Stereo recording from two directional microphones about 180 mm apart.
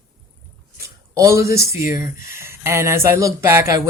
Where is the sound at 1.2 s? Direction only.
15° right (ahead or behind).